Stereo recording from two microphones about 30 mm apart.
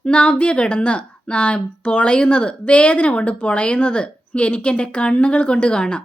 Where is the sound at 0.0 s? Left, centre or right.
Left.